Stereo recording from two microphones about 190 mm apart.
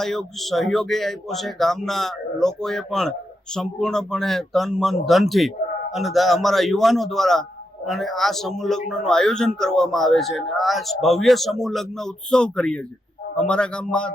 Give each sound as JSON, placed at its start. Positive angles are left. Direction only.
{"t": 0.0, "sound": "speech", "side_deg": 0}